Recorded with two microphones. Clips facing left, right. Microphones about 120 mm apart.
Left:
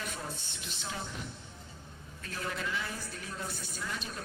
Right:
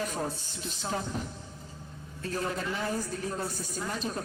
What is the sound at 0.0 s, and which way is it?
A woman's voice, 40° right (ahead or behind).